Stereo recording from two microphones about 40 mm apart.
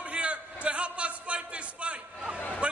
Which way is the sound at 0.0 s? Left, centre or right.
Right.